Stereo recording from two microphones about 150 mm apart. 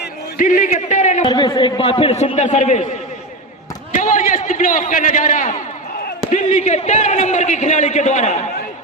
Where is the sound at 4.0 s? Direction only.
60° left (ahead or behind).